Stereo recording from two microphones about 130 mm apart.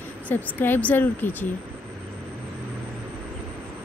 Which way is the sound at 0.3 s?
15° left (ahead or behind).